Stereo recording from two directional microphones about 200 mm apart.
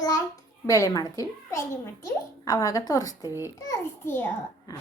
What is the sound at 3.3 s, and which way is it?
Speech, 15° right (ahead or behind).